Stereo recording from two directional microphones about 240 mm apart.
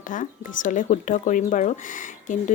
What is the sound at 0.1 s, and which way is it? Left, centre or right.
Speech, left.